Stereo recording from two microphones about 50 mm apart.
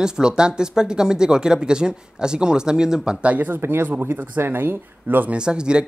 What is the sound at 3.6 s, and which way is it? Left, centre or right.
Speech, right.